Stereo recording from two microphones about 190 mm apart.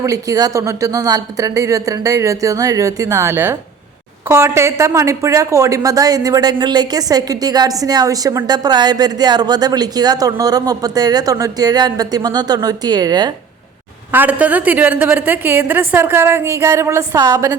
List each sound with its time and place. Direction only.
0.0 s speech: 20° right (ahead or behind)
14.1 s speech: 10° right (ahead or behind)